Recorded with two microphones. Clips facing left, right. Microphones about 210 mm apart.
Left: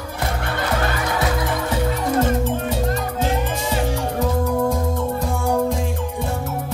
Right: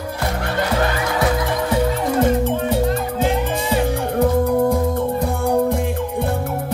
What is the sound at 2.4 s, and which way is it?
Music, 55° right (ahead or behind).